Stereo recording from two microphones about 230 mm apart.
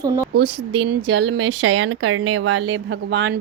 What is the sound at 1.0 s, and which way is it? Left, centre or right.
Speech, right.